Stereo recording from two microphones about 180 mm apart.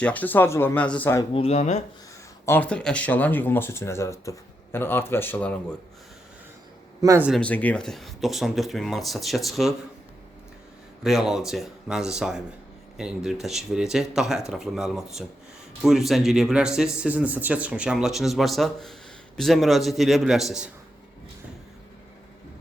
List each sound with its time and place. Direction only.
0.0 s speech: 10° left (ahead or behind)
1.3 s speech: 35° left (ahead or behind)
2.5 s speech: 5° left (ahead or behind)
7.0 s speech: 20° right (ahead or behind)
7.3 s speech: 5° left (ahead or behind)
11.0 s speech: centre (ahead or behind)